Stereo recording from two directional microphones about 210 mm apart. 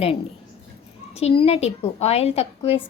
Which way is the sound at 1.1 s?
25° left (ahead or behind).